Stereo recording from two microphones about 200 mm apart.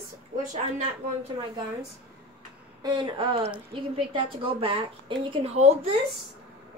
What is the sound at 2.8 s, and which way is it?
Speech, 20° right (ahead or behind).